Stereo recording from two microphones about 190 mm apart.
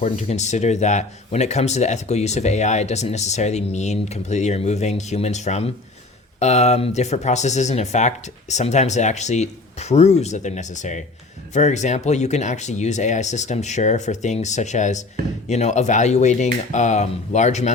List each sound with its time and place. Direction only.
0.0 s speech: 35° left (ahead or behind)